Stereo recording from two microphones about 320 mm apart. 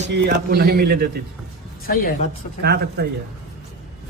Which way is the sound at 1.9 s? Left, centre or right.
Left.